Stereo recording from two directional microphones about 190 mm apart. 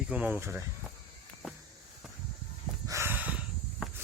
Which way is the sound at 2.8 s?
15° right (ahead or behind).